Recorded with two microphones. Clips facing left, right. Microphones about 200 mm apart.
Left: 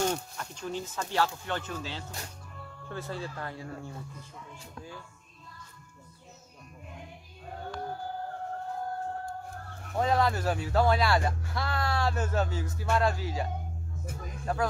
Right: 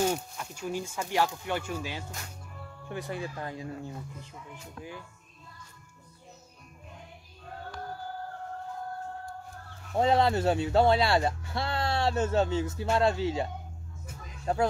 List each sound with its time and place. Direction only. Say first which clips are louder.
0.0 s speech: right 2 dB; 10° right (ahead or behind)
9.9 s speech: right 3 dB; 25° right (ahead or behind)
14.0 s music: left 6 dB; 50° left (ahead or behind)
14.4 s speech: right 3 dB; 25° right (ahead or behind)